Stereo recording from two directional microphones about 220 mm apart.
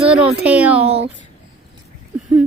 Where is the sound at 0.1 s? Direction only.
5° right (ahead or behind).